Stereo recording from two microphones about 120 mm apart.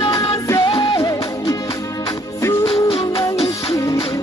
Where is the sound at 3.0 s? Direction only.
30° left (ahead or behind).